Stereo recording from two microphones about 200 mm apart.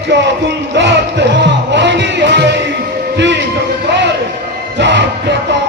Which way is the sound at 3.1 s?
60° right (ahead or behind).